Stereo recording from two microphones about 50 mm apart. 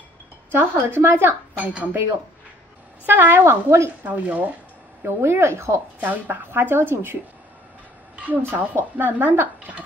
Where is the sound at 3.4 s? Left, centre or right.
Right.